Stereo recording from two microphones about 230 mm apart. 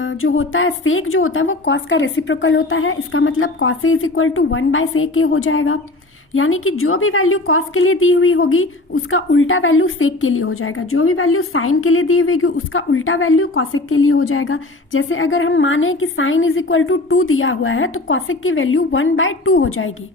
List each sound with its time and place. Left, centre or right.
0.0 s a woman's voice: left